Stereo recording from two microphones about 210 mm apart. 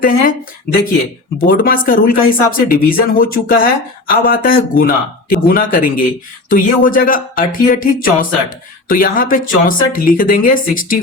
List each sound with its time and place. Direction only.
0.0 s speech: 40° left (ahead or behind)